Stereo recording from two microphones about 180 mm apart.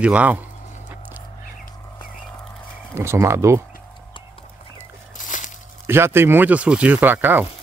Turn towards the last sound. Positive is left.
turn(degrees=-10)  # may be behind; listen again after turning